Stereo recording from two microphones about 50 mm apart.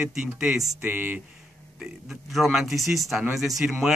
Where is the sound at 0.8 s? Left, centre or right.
Right.